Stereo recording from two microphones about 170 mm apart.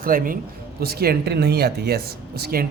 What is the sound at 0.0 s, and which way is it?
Speech, 55° right (ahead or behind).